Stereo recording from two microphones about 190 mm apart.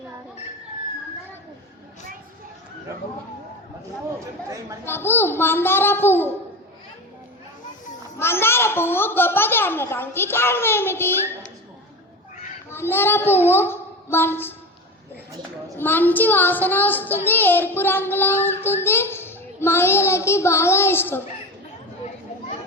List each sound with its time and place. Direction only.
4.4 s speech: 15° right (ahead or behind)
4.9 s speech: 10° left (ahead or behind)
8.2 s speech: 10° left (ahead or behind)
12.7 s a child's voice: 10° left (ahead or behind)
15.8 s speech: 10° left (ahead or behind)